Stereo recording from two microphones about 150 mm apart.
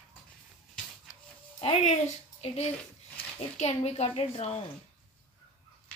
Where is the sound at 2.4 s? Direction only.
45° left (ahead or behind).